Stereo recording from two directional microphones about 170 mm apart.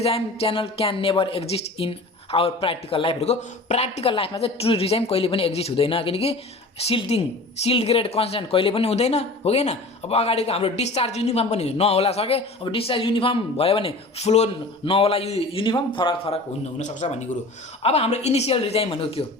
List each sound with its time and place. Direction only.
0.0 s speech: 35° left (ahead or behind)